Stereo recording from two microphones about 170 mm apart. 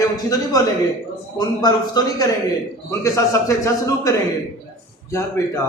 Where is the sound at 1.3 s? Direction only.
25° left (ahead or behind).